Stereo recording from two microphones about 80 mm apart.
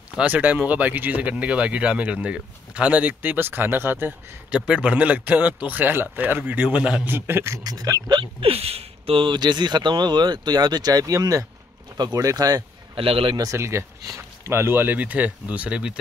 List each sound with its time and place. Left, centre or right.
0.1 s speech: centre
4.5 s speech: centre
7.1 s speech: right
7.5 s speech: right
9.1 s speech: right
13.4 s speech: right; by 15.9 s centre